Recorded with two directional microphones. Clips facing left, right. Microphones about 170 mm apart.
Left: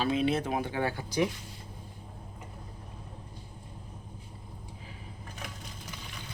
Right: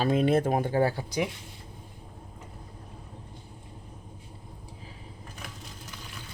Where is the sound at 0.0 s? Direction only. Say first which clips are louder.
Right 4 dB; 45° right (ahead or behind).